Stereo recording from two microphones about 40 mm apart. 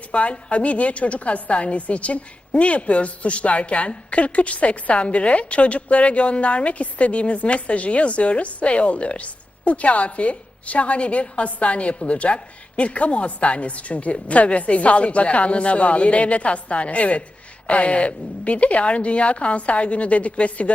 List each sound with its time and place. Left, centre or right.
0.1 s a woman's voice: left